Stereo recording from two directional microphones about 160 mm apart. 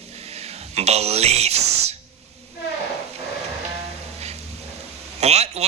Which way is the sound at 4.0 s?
40° right (ahead or behind).